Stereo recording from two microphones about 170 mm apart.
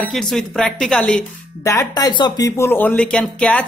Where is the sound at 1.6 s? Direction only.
15° left (ahead or behind).